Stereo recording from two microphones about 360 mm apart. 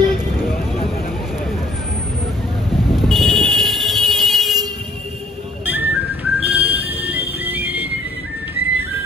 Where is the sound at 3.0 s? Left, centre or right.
Centre.